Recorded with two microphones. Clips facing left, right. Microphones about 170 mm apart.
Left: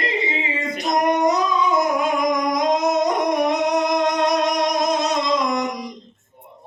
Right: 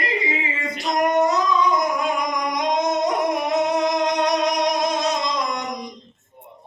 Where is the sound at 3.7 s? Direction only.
Centre (ahead or behind).